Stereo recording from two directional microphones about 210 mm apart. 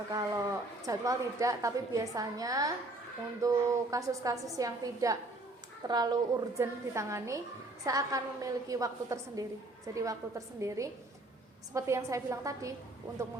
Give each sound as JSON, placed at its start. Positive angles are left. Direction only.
{"t": 0.1, "sound": "a woman's voice", "side_deg": -15}